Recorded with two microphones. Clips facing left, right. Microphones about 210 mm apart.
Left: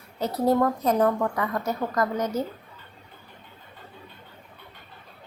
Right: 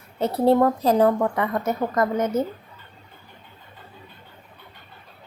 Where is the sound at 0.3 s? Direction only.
30° right (ahead or behind).